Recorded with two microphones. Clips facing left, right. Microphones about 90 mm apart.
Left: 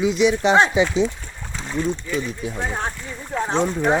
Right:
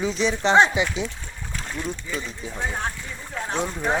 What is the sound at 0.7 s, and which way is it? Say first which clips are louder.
Speech: left 7 dB; 25° left (ahead or behind).